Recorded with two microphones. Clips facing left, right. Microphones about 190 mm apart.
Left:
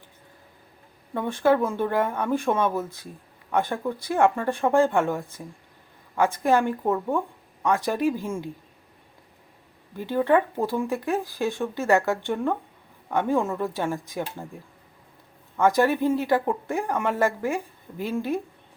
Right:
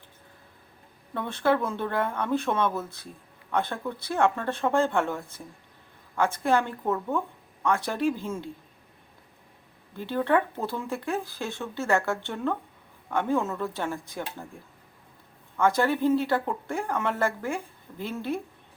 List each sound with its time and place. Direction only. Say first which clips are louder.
1.1 s speech: left 4 dB; 15° left (ahead or behind)
10.0 s speech: left 3 dB; 15° left (ahead or behind)
15.5 s speech: left 3 dB; 15° left (ahead or behind)